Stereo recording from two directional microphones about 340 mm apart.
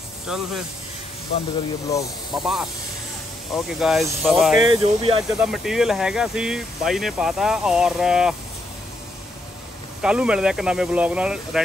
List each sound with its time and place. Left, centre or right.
0.3 s speech: centre
1.9 s speech: centre
4.6 s speech: centre
5.4 s speech: centre
10.0 s speech: centre